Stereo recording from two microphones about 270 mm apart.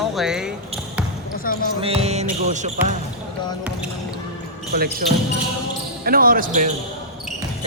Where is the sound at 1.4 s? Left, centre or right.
Left.